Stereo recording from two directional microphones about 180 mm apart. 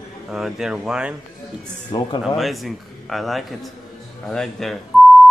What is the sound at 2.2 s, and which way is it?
A man's voice, centre (ahead or behind).